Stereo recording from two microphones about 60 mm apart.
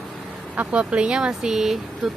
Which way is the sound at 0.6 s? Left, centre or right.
Centre.